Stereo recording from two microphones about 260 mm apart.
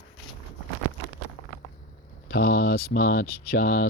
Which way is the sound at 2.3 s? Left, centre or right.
Left.